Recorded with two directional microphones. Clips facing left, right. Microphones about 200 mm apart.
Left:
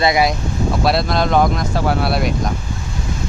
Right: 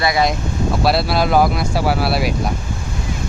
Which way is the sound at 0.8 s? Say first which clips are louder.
Right 1 dB; 5° right (ahead or behind).